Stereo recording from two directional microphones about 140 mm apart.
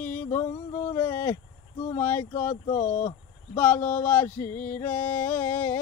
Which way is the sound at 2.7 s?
75° left (ahead or behind).